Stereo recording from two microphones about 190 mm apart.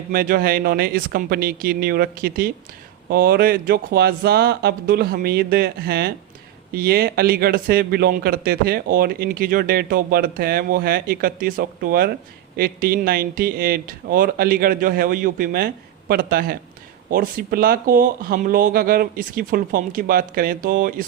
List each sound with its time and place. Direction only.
0.1 s a man's voice: 50° right (ahead or behind)